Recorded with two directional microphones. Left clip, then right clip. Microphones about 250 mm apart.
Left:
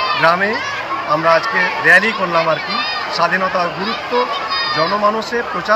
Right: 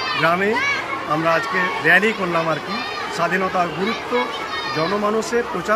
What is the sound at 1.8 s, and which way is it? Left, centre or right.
Speech, centre.